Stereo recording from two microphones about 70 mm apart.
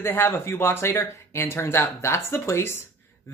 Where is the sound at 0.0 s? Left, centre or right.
Left.